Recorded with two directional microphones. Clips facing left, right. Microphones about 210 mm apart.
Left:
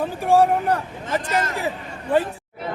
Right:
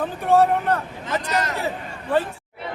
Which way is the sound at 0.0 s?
10° left (ahead or behind).